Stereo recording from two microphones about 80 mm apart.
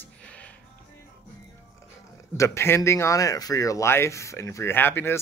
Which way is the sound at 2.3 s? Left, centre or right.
Left.